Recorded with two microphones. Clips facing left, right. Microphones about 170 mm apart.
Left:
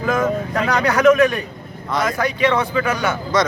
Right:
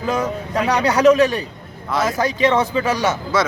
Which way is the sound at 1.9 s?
5° right (ahead or behind).